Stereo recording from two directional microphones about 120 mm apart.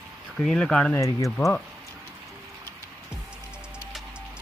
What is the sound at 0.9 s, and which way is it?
Speech, 25° left (ahead or behind).